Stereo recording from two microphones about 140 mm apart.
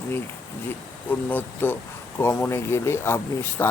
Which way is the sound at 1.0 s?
15° left (ahead or behind).